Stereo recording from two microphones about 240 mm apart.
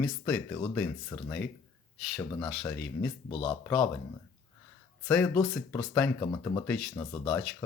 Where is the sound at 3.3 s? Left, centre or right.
Left.